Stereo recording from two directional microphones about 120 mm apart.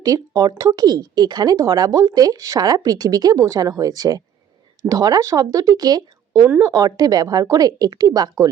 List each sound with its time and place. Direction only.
0.0 s speech: 30° right (ahead or behind)